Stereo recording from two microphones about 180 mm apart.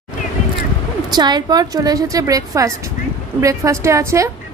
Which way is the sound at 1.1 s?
25° right (ahead or behind).